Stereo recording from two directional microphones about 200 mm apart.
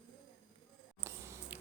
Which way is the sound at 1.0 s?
10° right (ahead or behind).